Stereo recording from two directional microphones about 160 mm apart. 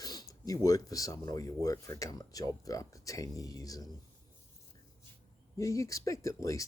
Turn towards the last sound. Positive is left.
turn(degrees=20)  # may be behind; listen again after turning